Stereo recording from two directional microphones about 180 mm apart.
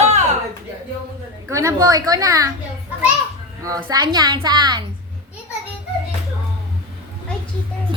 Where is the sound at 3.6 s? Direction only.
20° right (ahead or behind).